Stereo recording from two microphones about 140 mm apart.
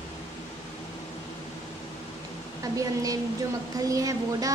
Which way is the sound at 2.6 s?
25° right (ahead or behind).